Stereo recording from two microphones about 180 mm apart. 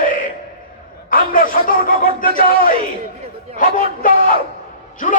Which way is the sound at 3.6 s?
50° left (ahead or behind).